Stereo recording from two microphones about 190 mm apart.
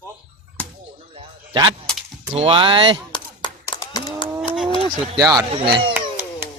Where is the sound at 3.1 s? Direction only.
20° left (ahead or behind).